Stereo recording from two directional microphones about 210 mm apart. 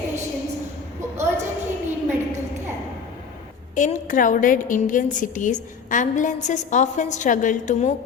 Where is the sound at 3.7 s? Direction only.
35° left (ahead or behind).